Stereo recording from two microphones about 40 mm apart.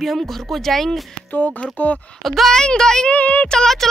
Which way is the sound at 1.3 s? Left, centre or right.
Left.